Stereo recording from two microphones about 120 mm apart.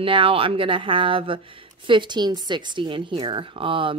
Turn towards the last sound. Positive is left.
turn(degrees=-45)  # may be behind; listen again after turning